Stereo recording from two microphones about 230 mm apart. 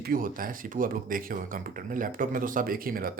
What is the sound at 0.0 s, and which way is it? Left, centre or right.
Speech, right.